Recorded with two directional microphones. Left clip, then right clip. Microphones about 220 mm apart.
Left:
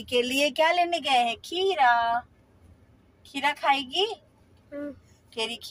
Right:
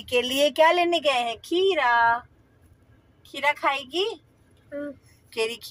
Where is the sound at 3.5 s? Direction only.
20° right (ahead or behind).